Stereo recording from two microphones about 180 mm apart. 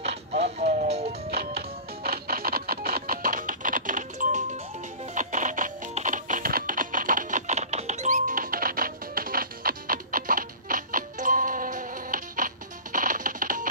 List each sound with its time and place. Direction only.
0.0 s music: 35° right (ahead or behind)
1.3 s music: 60° right (ahead or behind)